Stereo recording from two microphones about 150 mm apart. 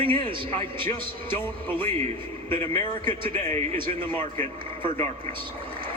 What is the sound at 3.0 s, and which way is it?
Speech, 35° right (ahead or behind).